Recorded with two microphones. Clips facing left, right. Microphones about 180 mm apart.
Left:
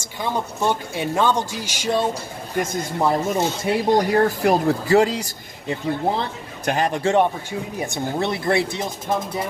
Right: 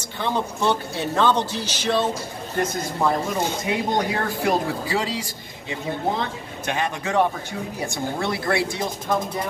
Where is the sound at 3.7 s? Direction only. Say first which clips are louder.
Left 7 dB; 35° left (ahead or behind).